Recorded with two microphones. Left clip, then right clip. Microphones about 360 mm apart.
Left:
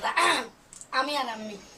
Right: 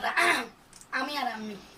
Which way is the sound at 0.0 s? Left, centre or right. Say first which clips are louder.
Left 1 dB; centre.